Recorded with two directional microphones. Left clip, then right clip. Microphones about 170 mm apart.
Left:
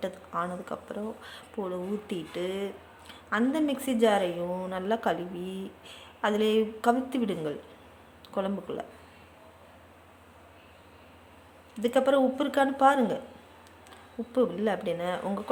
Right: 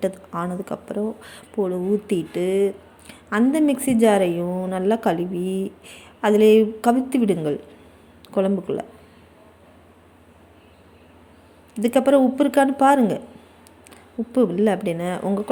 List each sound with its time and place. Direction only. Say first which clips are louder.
0.0 s a woman's voice: right 7 dB; 25° right (ahead or behind)
11.7 s a woman's voice: right 7 dB; 30° right (ahead or behind)